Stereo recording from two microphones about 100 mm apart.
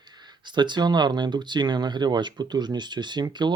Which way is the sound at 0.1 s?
45° right (ahead or behind).